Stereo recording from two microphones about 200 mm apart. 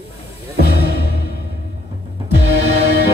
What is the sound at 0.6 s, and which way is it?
Music, 55° left (ahead or behind).